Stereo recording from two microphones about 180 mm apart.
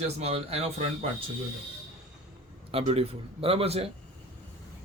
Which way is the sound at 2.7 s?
35° right (ahead or behind).